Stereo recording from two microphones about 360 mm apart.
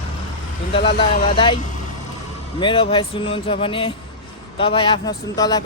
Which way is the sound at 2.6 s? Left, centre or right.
Centre.